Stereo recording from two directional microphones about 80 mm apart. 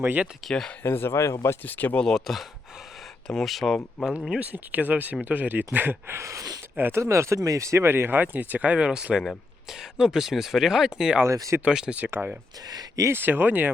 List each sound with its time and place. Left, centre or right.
0.0 s speech: right
0.4 s speech: centre
0.9 s speech: left
1.6 s speech: left
2.0 s speech: centre
4.0 s speech: centre; by 6.4 s right
6.7 s speech: right
7.0 s speech: right; by 11.2 s centre
11.3 s speech: right
11.6 s speech: centre
12.6 s speech: right
13.1 s speech: right